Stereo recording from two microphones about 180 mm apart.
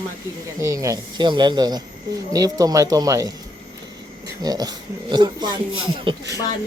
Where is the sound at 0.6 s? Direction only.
15° right (ahead or behind).